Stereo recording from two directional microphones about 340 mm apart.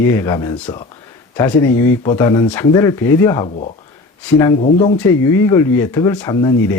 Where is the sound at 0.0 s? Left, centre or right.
Centre.